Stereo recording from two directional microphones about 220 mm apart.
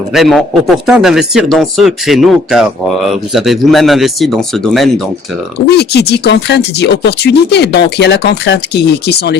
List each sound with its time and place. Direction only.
0.1 s speech: centre (ahead or behind)
5.7 s speech: 50° left (ahead or behind)